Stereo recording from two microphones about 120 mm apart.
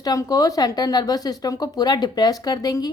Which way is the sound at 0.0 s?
30° left (ahead or behind).